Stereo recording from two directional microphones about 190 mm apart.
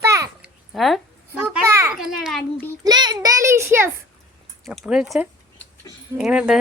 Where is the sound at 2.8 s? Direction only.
20° right (ahead or behind).